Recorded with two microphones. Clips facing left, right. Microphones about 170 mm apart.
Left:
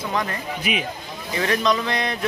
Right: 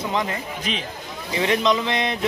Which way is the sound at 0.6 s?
10° left (ahead or behind).